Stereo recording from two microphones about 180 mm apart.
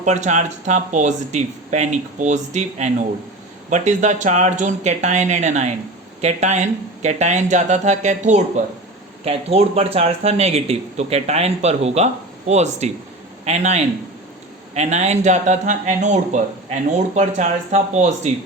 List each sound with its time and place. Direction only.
0.0 s a man's voice: 40° right (ahead or behind)